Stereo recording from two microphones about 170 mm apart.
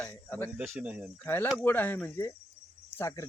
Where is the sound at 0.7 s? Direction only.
5° right (ahead or behind).